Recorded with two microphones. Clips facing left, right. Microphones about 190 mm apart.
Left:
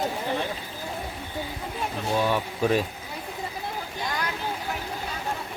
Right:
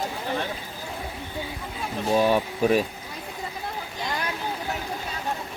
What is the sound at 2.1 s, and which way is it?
Speech, 15° right (ahead or behind).